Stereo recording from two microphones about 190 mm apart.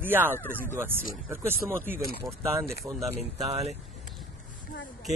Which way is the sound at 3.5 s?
35° right (ahead or behind).